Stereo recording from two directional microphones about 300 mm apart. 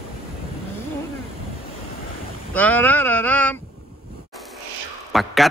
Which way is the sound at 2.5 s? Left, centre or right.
Centre.